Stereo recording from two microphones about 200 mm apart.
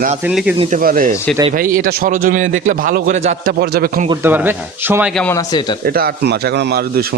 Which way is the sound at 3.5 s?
50° right (ahead or behind).